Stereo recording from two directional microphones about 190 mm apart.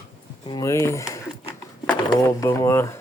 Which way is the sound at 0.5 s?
15° left (ahead or behind).